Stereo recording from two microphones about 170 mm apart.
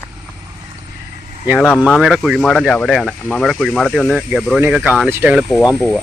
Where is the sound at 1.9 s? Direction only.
Centre (ahead or behind).